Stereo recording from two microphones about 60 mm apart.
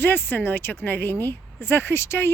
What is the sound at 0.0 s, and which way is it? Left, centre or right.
Speech, left.